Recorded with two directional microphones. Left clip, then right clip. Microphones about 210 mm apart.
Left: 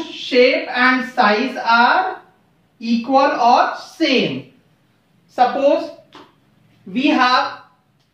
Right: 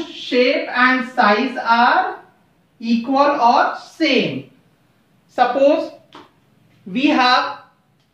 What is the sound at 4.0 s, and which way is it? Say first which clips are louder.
Speech: even; 10° right (ahead or behind).